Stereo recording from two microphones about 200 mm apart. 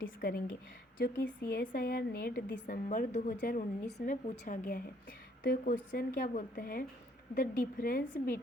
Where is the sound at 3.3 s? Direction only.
55° left (ahead or behind).